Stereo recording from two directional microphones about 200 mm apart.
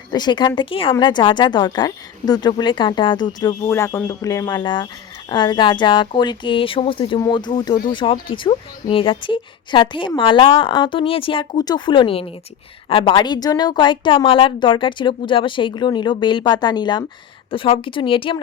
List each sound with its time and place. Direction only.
0.1 s speech: 20° left (ahead or behind)